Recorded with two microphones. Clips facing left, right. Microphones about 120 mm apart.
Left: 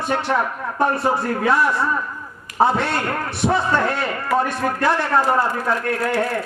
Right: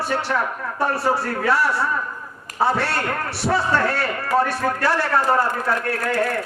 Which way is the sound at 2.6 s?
20° left (ahead or behind).